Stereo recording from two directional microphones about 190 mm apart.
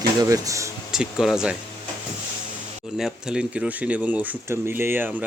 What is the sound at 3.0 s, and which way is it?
Speech, 5° right (ahead or behind).